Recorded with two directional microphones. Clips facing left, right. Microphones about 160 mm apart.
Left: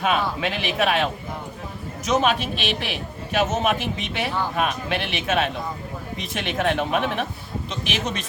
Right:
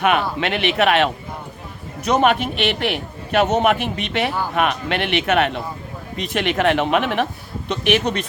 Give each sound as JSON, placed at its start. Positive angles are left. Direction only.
{"t": 0.0, "sound": "a man's voice", "side_deg": -70}